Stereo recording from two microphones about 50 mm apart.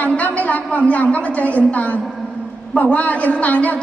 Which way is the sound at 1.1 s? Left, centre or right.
Left.